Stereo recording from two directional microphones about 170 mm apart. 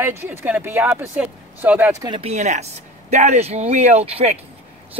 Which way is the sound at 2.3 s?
40° right (ahead or behind).